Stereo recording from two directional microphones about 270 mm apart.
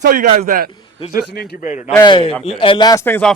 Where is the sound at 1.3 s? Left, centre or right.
Left.